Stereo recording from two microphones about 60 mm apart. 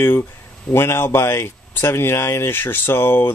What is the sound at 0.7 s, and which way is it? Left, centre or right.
Speech, left.